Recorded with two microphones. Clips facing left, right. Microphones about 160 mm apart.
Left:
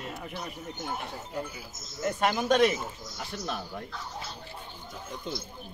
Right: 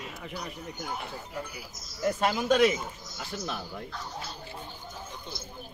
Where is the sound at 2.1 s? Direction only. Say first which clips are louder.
Even; 5° right (ahead or behind).